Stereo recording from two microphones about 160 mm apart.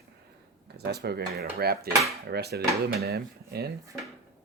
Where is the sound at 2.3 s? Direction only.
90° right.